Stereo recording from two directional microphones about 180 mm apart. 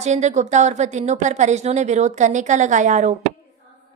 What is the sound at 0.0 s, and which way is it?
A woman's voice, 40° right (ahead or behind).